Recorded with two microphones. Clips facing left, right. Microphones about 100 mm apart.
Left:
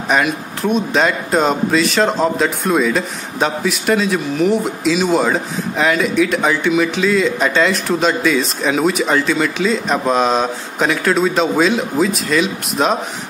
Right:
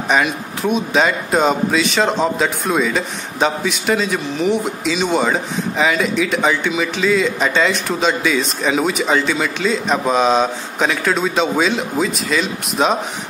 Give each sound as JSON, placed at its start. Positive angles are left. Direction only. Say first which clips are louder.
{"t": 0.1, "sound": "speech", "louder": "left 1 dB", "side_deg": 0}